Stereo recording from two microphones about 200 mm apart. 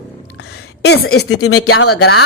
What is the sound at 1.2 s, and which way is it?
Speech, 90° left.